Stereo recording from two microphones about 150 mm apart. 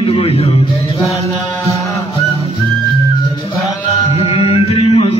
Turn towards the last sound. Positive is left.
turn(degrees=40)  # may be behind; listen again after turning